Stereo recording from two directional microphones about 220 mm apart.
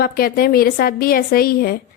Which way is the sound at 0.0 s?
45° left (ahead or behind).